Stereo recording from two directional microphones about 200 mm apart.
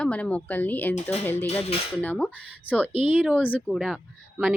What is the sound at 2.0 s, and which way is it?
Speech, 10° left (ahead or behind).